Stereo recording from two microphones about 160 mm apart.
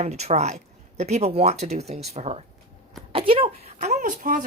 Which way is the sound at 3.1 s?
35° right (ahead or behind).